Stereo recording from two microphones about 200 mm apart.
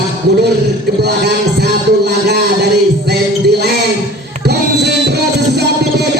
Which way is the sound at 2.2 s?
55° right (ahead or behind).